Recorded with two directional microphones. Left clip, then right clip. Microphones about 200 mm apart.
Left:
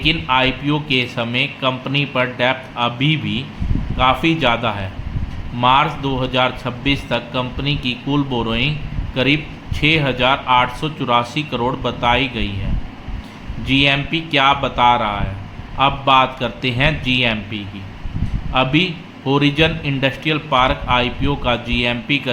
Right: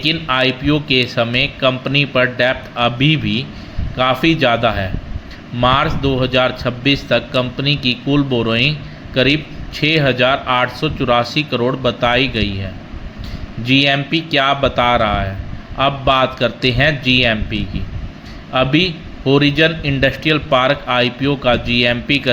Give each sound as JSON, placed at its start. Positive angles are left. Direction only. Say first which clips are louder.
{"t": 0.0, "sound": "a man's voice", "louder": "even", "side_deg": -15}
{"t": 13.7, "sound": "a man's voice", "louder": "right 2 dB", "side_deg": -15}